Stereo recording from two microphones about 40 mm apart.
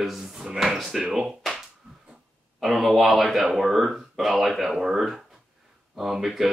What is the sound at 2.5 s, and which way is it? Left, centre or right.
A man's voice, centre.